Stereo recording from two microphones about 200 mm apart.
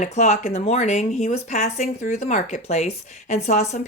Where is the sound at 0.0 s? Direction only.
35° left (ahead or behind).